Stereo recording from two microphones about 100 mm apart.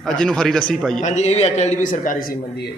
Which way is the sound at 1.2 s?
90° left.